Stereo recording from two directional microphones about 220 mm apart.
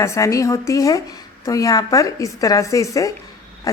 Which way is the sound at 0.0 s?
15° left (ahead or behind).